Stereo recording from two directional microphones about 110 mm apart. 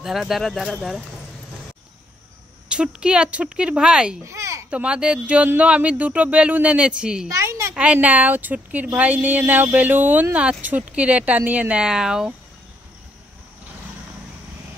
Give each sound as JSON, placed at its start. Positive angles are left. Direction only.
{"t": 0.0, "sound": "speech", "side_deg": 0}
{"t": 2.7, "sound": "a woman's voice", "side_deg": -10}
{"t": 4.2, "sound": "a sound", "side_deg": -25}
{"t": 4.6, "sound": "a woman's voice", "side_deg": -10}
{"t": 7.2, "sound": "a sound", "side_deg": -30}
{"t": 7.7, "sound": "a woman's voice", "side_deg": -10}